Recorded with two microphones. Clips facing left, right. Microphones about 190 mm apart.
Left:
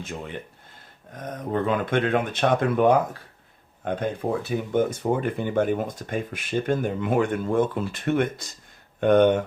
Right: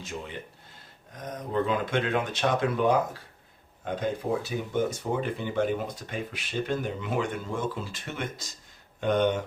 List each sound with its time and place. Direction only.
0.0 s speech: 55° left (ahead or behind)
4.4 s speech: 55° left (ahead or behind)